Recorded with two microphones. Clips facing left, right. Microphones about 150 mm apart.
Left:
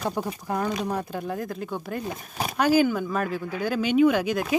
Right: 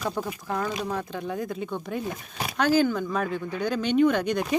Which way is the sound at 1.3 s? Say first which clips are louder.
Even; centre (ahead or behind).